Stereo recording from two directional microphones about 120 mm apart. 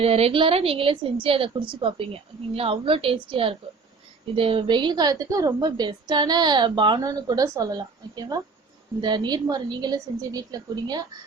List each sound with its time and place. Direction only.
0.0 s a woman's voice: 55° right (ahead or behind); by 11.0 s 35° right (ahead or behind)